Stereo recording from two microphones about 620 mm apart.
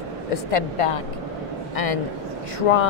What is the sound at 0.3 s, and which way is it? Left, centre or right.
Speech, left.